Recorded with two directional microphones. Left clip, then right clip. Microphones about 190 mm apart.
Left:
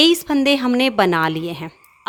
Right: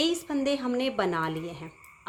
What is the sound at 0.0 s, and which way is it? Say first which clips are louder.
A woman's voice: left 12 dB; 50° left (ahead or behind).